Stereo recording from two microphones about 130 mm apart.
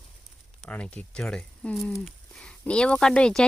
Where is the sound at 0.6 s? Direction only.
10° left (ahead or behind).